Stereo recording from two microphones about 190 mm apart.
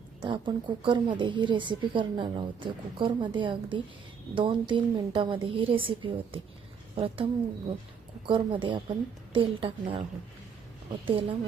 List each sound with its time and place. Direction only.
0.2 s a woman's voice: 25° right (ahead or behind)
8.3 s a woman's voice: 25° right (ahead or behind)
11.0 s a woman's voice: 25° right (ahead or behind)